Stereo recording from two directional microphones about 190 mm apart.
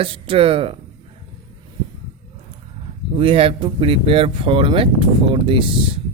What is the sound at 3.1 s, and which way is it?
Speech, 30° right (ahead or behind).